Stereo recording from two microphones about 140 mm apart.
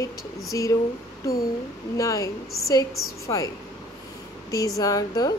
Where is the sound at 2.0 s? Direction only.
25° left (ahead or behind).